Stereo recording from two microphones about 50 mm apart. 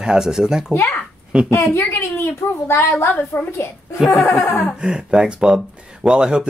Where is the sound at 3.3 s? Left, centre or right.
Left.